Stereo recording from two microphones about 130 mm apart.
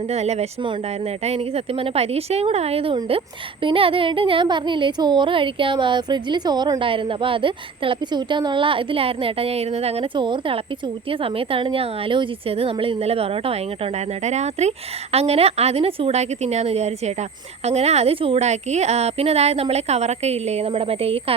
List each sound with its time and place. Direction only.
0.1 s a woman's voice: 55° right (ahead or behind)
10.2 s a woman's voice: 40° right (ahead or behind)
14.3 s a woman's voice: 60° right (ahead or behind)